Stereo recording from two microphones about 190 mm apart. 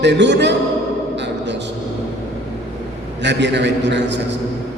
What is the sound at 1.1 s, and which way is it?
Music, 65° right (ahead or behind).